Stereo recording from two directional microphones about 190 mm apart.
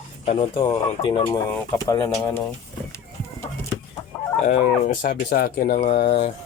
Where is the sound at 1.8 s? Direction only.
15° left (ahead or behind).